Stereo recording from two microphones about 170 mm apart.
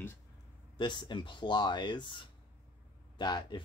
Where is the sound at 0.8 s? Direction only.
25° left (ahead or behind).